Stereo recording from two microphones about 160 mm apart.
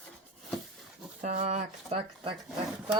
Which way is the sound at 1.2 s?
50° right (ahead or behind).